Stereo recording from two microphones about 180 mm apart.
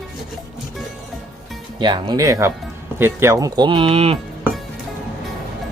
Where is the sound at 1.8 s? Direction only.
25° right (ahead or behind).